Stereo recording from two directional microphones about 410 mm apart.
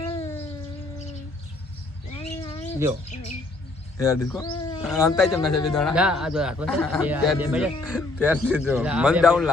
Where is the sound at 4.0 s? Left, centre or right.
Centre.